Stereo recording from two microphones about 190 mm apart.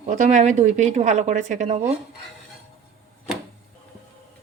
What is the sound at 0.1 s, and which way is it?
Speech, 40° right (ahead or behind).